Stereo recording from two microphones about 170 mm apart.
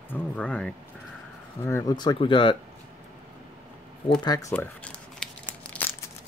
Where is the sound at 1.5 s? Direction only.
20° left (ahead or behind).